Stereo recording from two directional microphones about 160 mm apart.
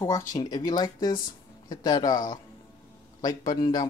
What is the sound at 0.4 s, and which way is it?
Speech, 25° left (ahead or behind).